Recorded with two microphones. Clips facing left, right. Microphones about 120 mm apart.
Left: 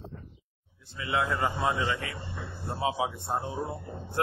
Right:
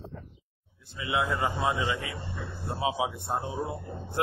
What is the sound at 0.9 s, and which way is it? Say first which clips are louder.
Speech: even; 15° right (ahead or behind).